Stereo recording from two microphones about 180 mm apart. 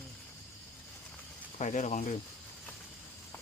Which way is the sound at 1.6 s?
40° left (ahead or behind).